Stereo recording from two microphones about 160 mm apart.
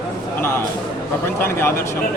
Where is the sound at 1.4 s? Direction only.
15° left (ahead or behind).